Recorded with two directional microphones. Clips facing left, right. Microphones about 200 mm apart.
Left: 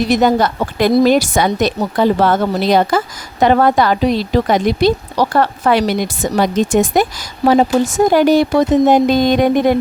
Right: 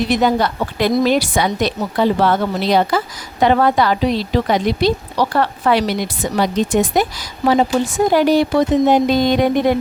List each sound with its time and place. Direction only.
0.0 s a woman's voice: 45° left (ahead or behind)